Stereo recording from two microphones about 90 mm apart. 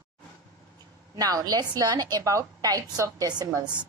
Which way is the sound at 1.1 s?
45° right (ahead or behind).